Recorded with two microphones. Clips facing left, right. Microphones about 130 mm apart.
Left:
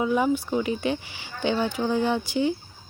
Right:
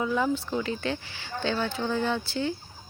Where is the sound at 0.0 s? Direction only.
15° left (ahead or behind).